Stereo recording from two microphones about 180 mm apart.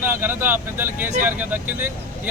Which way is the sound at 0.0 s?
10° right (ahead or behind).